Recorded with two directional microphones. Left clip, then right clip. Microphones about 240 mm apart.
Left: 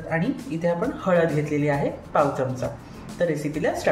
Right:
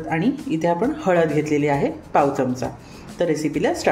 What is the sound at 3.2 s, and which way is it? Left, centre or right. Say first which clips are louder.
Speech: right 3 dB; right.